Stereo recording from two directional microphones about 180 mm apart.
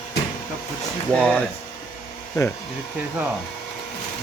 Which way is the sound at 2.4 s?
20° left (ahead or behind).